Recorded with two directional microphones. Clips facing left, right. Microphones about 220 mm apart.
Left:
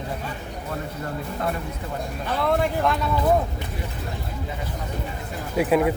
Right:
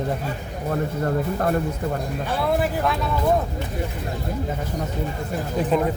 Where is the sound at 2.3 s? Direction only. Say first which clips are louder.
Even; 10° right (ahead or behind).